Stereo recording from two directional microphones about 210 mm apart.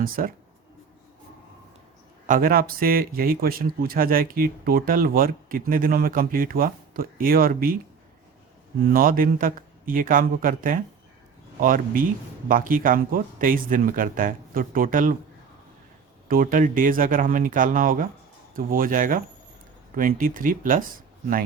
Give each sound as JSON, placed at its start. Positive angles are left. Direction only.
{"t": 0.2, "sound": "speech", "side_deg": -40}
{"t": 2.2, "sound": "a man's voice", "side_deg": -40}
{"t": 8.8, "sound": "speech", "side_deg": -45}
{"t": 16.3, "sound": "speech", "side_deg": -40}